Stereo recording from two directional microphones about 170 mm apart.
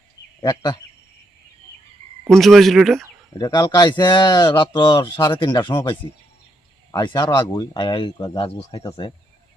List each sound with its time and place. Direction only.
0.4 s speech: 25° left (ahead or behind)
2.2 s speech: centre (ahead or behind)
3.3 s speech: 20° left (ahead or behind)